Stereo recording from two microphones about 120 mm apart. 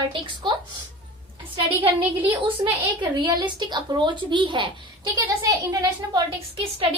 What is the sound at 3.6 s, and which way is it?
A woman's voice, 40° right (ahead or behind).